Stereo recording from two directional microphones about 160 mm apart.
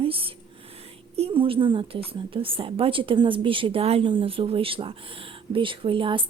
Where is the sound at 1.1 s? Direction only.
35° right (ahead or behind).